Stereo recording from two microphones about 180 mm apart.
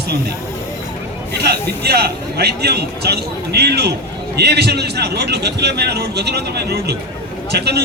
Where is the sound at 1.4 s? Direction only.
60° right (ahead or behind).